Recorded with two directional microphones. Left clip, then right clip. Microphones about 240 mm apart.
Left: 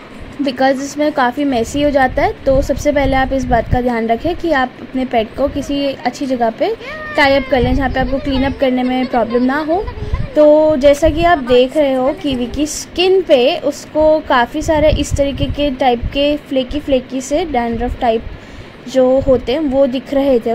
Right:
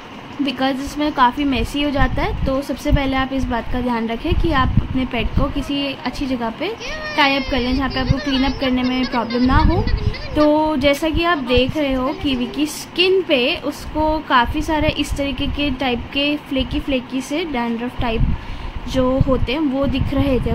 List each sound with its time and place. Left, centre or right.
0.5 s a woman's voice: centre